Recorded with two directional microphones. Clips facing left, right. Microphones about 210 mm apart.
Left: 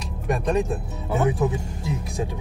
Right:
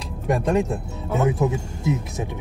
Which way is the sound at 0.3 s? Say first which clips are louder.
Right 2 dB; 25° right (ahead or behind).